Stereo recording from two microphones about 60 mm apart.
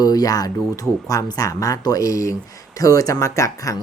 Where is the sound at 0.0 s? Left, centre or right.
Left.